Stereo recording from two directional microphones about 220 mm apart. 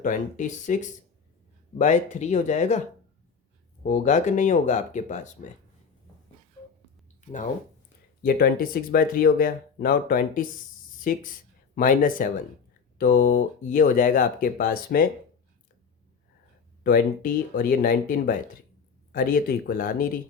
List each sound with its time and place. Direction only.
0.0 s speech: 35° left (ahead or behind)
3.8 s speech: 35° left (ahead or behind)
7.2 s a sound: 35° left (ahead or behind)
8.2 s speech: 40° left (ahead or behind)
16.8 s speech: 40° left (ahead or behind)